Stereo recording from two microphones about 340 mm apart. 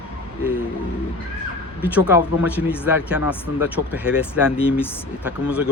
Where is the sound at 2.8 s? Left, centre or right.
Centre.